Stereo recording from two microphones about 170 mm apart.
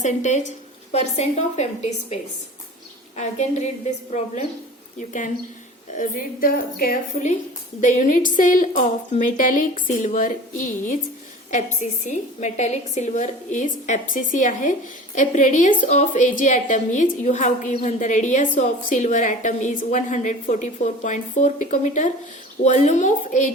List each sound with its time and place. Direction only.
0.0 s a woman's voice: 45° left (ahead or behind)
3.2 s a woman's voice: 45° left (ahead or behind)
4.9 s a woman's voice: 50° left (ahead or behind)